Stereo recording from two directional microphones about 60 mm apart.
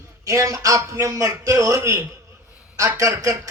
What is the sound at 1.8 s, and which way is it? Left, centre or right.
Music, right.